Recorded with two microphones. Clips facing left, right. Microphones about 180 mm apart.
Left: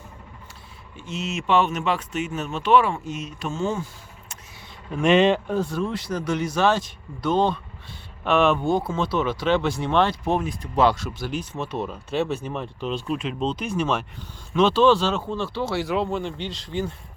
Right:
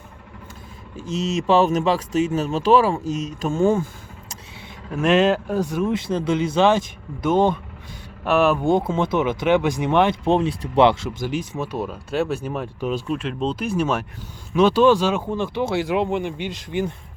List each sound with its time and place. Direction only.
0.9 s speech: 40° right (ahead or behind)
4.9 s speech: centre (ahead or behind)
5.5 s speech: 15° right (ahead or behind)
8.2 s speech: 5° right (ahead or behind)
8.6 s speech: 20° right (ahead or behind)
10.4 s speech: 30° right (ahead or behind)
11.5 s speech: 5° right (ahead or behind)